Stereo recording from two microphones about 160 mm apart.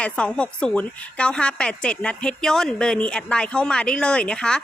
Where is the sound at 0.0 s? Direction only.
5° left (ahead or behind).